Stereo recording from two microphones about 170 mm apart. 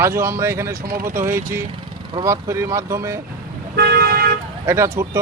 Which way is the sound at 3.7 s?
65° right (ahead or behind).